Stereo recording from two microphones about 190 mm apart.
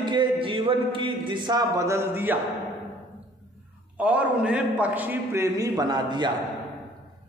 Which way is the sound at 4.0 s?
5° right (ahead or behind).